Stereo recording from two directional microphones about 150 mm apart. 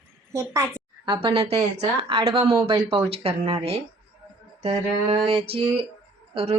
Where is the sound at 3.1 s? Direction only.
40° right (ahead or behind).